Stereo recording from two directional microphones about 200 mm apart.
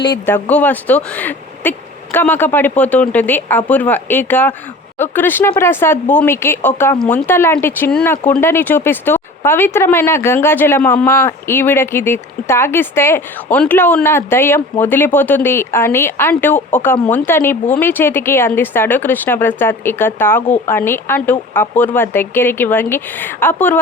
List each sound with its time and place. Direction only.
0.3 s a woman's voice: 10° left (ahead or behind)